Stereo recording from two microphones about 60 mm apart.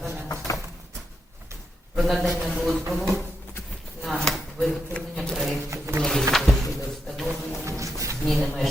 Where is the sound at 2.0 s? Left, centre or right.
Centre.